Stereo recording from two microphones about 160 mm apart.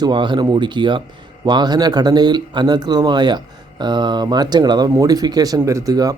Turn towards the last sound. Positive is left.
turn(degrees=-25)  # may be behind; listen again after turning